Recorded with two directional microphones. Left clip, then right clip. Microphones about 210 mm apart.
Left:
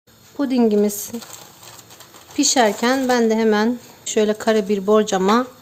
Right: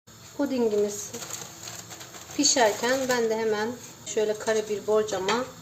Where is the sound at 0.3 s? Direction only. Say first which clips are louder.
Left 7 dB; 55° left (ahead or behind).